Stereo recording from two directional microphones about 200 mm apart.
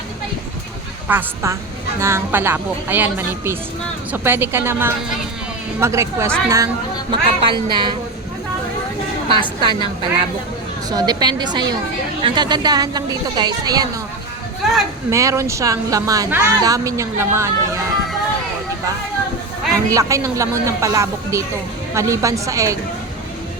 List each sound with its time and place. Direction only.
1.0 s a woman's voice: 10° right (ahead or behind)
9.3 s a woman's voice: 25° right (ahead or behind)
14.6 s speech: centre (ahead or behind)
15.1 s speech: 15° right (ahead or behind)
19.9 s speech: 15° right (ahead or behind)